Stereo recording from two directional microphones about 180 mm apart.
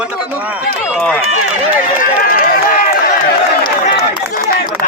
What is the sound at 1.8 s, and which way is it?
Speech, 50° left (ahead or behind).